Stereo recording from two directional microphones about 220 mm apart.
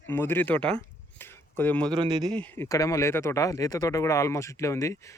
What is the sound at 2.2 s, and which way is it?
Speech, 5° left (ahead or behind).